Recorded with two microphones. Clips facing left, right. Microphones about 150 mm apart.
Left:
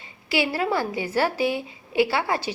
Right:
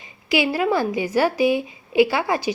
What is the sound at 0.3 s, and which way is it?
A woman's voice, 15° right (ahead or behind).